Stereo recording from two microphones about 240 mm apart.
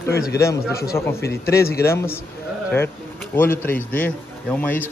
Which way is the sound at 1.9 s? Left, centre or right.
Centre.